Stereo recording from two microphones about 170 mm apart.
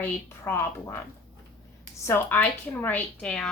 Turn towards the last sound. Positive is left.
turn(degrees=5)  # may be behind; listen again after turning